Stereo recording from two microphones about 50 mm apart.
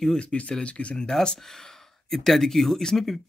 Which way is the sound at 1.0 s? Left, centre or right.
Centre.